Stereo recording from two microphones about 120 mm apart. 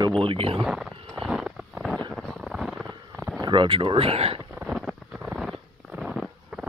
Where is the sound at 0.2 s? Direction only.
50° right (ahead or behind).